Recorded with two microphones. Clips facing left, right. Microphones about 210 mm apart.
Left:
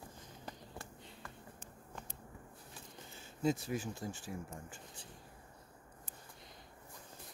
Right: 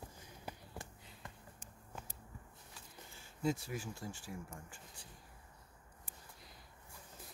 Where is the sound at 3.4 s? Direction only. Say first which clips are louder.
Left 3 dB; 20° left (ahead or behind).